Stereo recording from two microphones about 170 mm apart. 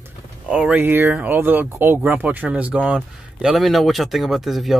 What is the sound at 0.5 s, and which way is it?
Speech, 10° right (ahead or behind).